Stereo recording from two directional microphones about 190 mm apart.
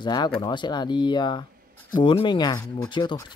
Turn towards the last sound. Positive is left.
turn(degrees=25)  # may be behind; listen again after turning